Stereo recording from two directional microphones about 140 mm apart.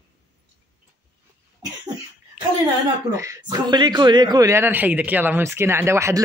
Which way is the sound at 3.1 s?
20° right (ahead or behind).